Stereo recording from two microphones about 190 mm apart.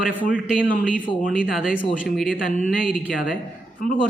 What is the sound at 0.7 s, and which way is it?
Speech, 45° left (ahead or behind).